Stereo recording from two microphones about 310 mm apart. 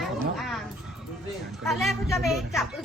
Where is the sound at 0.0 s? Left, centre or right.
Centre.